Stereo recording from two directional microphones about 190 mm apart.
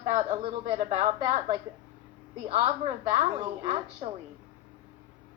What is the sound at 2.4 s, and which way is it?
A woman's voice, 35° right (ahead or behind).